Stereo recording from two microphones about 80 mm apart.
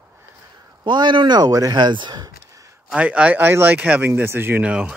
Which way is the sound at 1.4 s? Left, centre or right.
Right.